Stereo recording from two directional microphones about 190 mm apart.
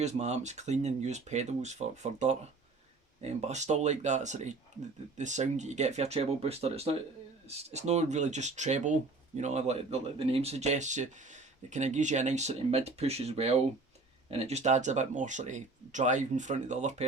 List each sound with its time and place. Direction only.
0.0 s speech: 35° right (ahead or behind)